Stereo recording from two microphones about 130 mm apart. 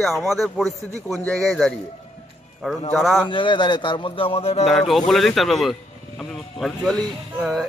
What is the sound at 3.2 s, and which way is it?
Speech, 40° left (ahead or behind).